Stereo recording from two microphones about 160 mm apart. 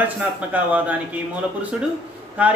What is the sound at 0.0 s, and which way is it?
Speech, 10° right (ahead or behind).